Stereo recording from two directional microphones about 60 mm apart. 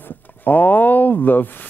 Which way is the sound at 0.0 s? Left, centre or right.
Left.